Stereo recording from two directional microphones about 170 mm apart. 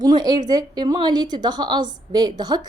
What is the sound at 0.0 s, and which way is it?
A woman's voice, 25° right (ahead or behind).